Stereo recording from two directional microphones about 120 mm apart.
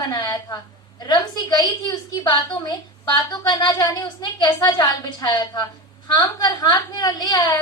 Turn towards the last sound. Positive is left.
turn(degrees=35)  # may be behind; listen again after turning